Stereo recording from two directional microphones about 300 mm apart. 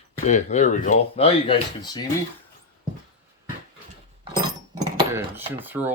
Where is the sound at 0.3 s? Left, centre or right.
Left.